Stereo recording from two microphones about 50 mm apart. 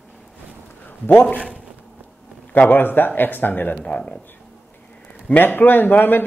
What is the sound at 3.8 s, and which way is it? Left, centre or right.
Speech, left.